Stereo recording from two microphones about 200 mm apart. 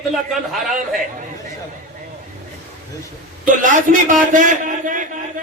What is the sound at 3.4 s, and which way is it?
A man's voice, 40° right (ahead or behind).